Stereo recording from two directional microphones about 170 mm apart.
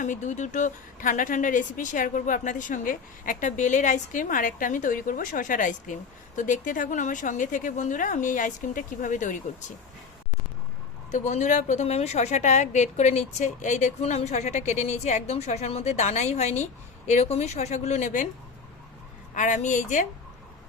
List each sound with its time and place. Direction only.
0.0 s speech: 45° left (ahead or behind)
11.1 s a woman's voice: 45° left (ahead or behind)
19.3 s speech: 50° left (ahead or behind)